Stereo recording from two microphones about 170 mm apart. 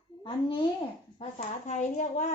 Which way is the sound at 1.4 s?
45° left (ahead or behind).